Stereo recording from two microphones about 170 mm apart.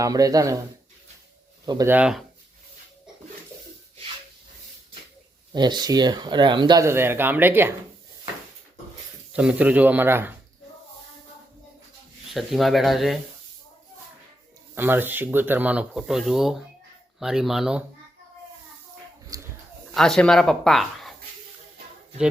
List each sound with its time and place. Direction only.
0.0 s speech: 20° right (ahead or behind)
1.6 s speech: 25° right (ahead or behind)
1.9 s speech: 5° right (ahead or behind)
5.5 s speech: 25° right (ahead or behind)
9.3 s speech: 5° right (ahead or behind)
12.3 s speech: centre (ahead or behind)
14.8 s speech: 10° right (ahead or behind)
19.3 s a sound: 20° right (ahead or behind)
19.9 s speech: 5° left (ahead or behind)